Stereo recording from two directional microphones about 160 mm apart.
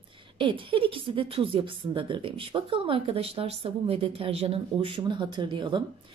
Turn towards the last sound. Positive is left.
turn(degrees=-30)  # may be behind; listen again after turning